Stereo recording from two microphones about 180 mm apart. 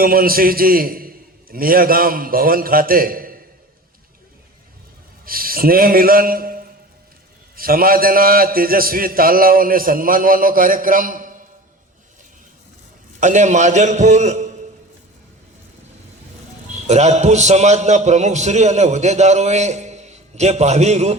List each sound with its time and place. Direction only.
0.0 s a man's voice: 55° right (ahead or behind)
5.2 s a man's voice: 55° right (ahead or behind)
13.1 s a man's voice: 45° right (ahead or behind)
16.8 s a man's voice: 40° right (ahead or behind)